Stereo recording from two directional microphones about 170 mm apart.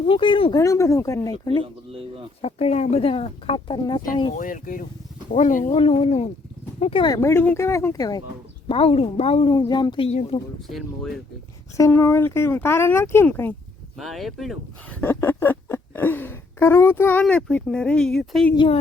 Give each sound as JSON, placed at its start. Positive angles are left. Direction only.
{"t": 0.0, "sound": "speech", "side_deg": 30}
{"t": 0.6, "sound": "speech", "side_deg": 20}
{"t": 1.6, "sound": "a sound", "side_deg": -35}
{"t": 2.4, "sound": "speech", "side_deg": 35}
{"t": 4.4, "sound": "speech", "side_deg": 50}
{"t": 5.7, "sound": "speech", "side_deg": 35}
{"t": 8.6, "sound": "speech", "side_deg": 35}
{"t": 10.1, "sound": "speech", "side_deg": 35}
{"t": 10.7, "sound": "speech", "side_deg": 0}
{"t": 11.8, "sound": "speech", "side_deg": 15}
{"t": 14.0, "sound": "speech", "side_deg": 0}
{"t": 15.0, "sound": "a sound", "side_deg": 15}
{"t": 18.5, "sound": "speech", "side_deg": 30}